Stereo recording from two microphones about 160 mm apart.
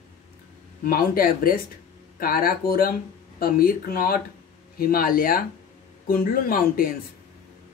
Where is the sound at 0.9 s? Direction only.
65° left (ahead or behind).